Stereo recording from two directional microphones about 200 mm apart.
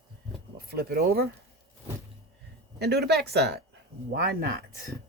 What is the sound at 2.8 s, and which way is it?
Speech, 55° right (ahead or behind).